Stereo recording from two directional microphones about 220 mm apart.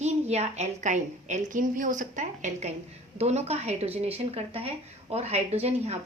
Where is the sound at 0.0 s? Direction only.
30° right (ahead or behind).